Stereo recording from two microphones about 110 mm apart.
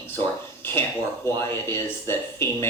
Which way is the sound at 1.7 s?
20° left (ahead or behind).